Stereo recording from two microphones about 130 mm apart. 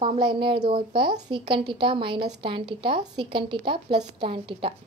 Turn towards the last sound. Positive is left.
turn(degrees=-40)  # may be behind; listen again after turning